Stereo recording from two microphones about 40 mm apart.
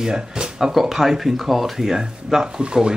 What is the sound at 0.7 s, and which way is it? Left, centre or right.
Speech, centre.